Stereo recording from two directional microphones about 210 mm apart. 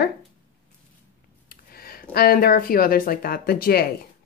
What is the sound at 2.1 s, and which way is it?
A woman's voice, 45° left (ahead or behind).